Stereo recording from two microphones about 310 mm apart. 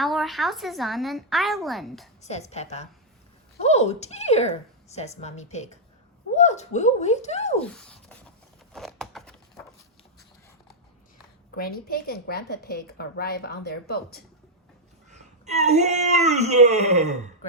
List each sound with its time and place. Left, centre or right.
0.0 s a woman's voice: centre
2.2 s speech: left
7.6 s a sound: centre
11.5 s a woman's voice: left
15.1 s speech: right